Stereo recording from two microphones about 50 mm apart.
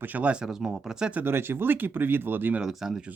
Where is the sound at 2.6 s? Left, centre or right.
Centre.